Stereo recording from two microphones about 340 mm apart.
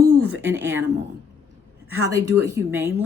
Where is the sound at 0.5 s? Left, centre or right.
Centre.